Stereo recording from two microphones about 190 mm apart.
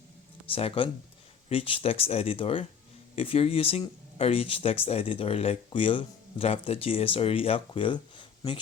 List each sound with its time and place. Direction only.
0.5 s speech: 30° left (ahead or behind)